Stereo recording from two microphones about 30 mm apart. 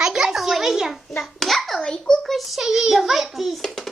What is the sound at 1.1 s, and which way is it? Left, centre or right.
Hands, centre.